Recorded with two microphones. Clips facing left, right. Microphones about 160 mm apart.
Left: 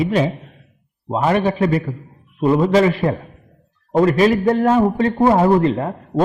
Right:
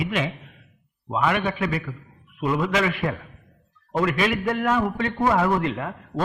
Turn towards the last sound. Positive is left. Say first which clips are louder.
# left 8 dB
turn(degrees=35)  # may be behind; listen again after turning